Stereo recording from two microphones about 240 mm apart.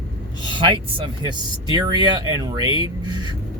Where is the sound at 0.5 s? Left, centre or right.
Centre.